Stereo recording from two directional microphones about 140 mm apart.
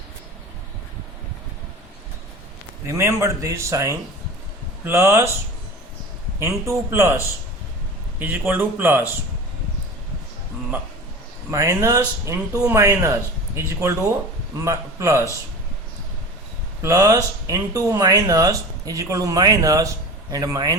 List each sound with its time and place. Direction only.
2.8 s speech: 20° right (ahead or behind)
6.4 s speech: 20° right (ahead or behind)
8.2 s speech: 15° right (ahead or behind)
11.5 s speech: 20° right (ahead or behind)
16.8 s speech: 25° right (ahead or behind)